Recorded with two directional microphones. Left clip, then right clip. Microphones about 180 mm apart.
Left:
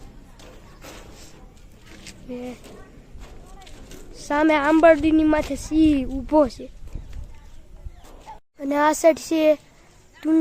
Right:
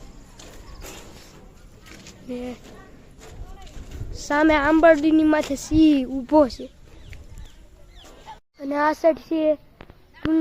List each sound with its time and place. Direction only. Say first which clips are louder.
2.3 s speech: right 2 dB; 5° right (ahead or behind)
4.1 s a woman's voice: right 1 dB; 5° right (ahead or behind)
8.5 s speech: left 2 dB; 15° left (ahead or behind)